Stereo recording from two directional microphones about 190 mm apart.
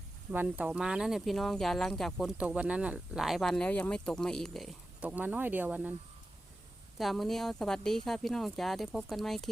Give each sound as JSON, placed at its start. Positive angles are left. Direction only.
{"t": 0.3, "sound": "speech", "side_deg": -10}
{"t": 7.0, "sound": "speech", "side_deg": 0}